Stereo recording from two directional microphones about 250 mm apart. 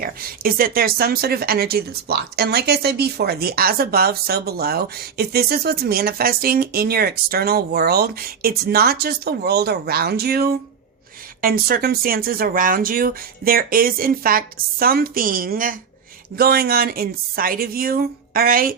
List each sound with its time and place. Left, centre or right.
0.0 s speech: right